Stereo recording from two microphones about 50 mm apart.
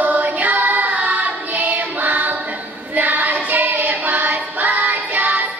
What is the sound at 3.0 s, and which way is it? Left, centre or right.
Child singing, right.